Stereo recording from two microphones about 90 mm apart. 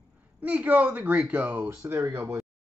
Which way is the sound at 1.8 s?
30° right (ahead or behind).